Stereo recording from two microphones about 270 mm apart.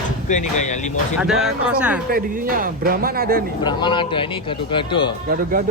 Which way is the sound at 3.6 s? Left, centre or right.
Centre.